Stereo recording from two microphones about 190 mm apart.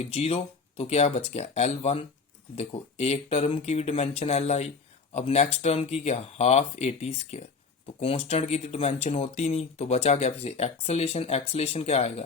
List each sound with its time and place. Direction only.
0.0 s speech: 35° left (ahead or behind)